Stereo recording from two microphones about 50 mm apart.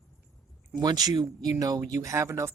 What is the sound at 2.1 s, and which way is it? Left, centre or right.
Speech, right.